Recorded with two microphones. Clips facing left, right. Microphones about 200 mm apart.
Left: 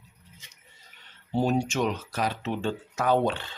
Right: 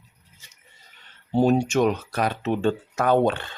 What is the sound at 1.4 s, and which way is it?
Speech, 50° right (ahead or behind).